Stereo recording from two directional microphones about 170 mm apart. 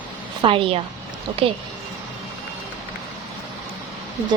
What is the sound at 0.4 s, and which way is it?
A woman's voice, 30° right (ahead or behind).